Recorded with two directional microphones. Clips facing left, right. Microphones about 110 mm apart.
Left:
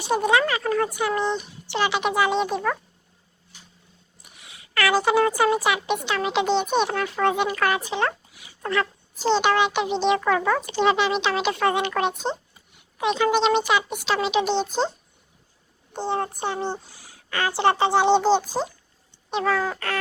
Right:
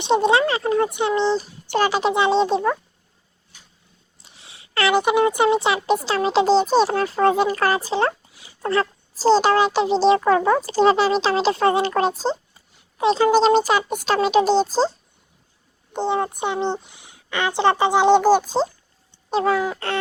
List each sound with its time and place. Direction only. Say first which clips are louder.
0.0 s speech: right 3 dB; 25° right (ahead or behind)
1.6 s speech: right 4 dB; 45° right (ahead or behind); by 2.7 s 25° right (ahead or behind)
4.2 s speech: even; 30° right (ahead or behind)
15.9 s speech: right 4 dB; 15° right (ahead or behind)
19.3 s speech: right 4 dB; 35° right (ahead or behind)
19.5 s speech: right 3 dB; 15° right (ahead or behind)